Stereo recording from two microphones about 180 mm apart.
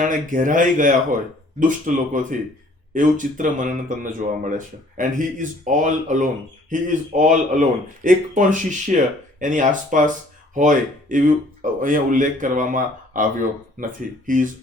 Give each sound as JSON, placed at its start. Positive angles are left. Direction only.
{"t": 0.0, "sound": "speech", "side_deg": -45}